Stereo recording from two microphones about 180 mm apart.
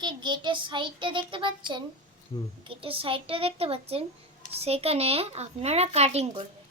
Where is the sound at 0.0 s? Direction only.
25° right (ahead or behind).